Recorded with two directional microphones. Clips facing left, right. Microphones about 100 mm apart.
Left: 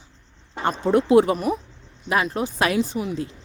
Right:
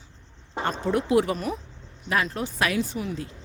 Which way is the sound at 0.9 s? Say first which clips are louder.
Left 6 dB; 30° left (ahead or behind).